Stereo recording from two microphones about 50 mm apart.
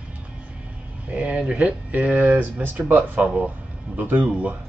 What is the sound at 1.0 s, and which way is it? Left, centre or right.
Speech, right.